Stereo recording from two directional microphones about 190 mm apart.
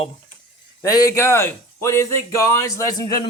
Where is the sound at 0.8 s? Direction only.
15° left (ahead or behind).